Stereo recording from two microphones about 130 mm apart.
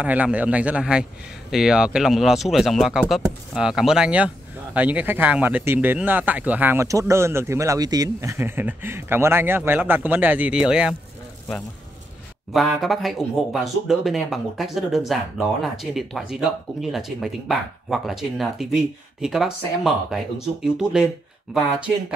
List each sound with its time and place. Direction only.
0.0 s speech: 10° right (ahead or behind)
12.5 s speech: centre (ahead or behind)